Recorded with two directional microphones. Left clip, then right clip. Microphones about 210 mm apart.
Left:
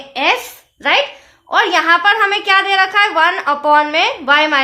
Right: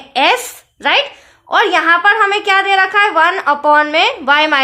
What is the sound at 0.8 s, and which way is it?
A woman's voice, 30° right (ahead or behind).